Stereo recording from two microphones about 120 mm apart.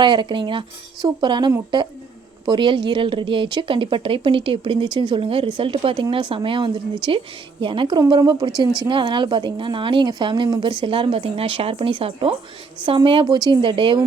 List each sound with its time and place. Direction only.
0.0 s a woman's voice: 40° right (ahead or behind)